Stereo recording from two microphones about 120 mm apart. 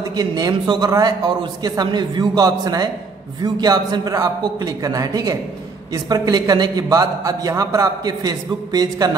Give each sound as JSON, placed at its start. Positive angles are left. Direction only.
{"t": 0.0, "sound": "a man's voice", "side_deg": -30}